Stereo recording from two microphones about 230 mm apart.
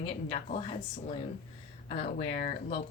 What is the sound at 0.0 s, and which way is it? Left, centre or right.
Speech, left.